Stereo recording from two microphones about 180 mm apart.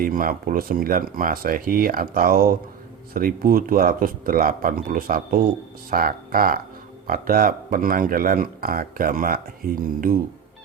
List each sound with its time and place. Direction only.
0.0 s speech: 50° right (ahead or behind)